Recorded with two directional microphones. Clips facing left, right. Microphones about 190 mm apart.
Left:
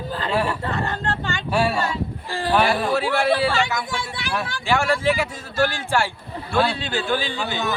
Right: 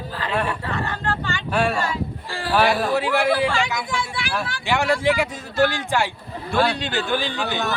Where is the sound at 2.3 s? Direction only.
15° left (ahead or behind).